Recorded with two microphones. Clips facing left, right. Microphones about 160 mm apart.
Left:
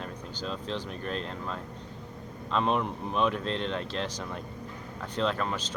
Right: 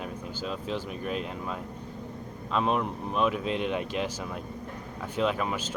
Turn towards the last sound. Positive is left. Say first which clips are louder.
# right 2 dB
turn(degrees=-10)  # may be behind; listen again after turning